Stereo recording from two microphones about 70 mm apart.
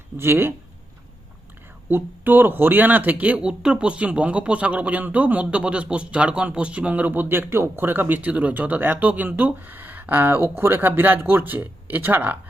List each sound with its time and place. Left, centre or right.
0.2 s speech: right
1.9 s speech: right